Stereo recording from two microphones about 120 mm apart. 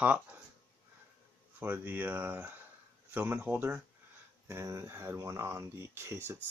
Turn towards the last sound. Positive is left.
turn(degrees=-20)  # may be behind; listen again after turning